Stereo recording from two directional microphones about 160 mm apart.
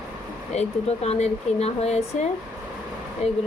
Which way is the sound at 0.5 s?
45° left (ahead or behind).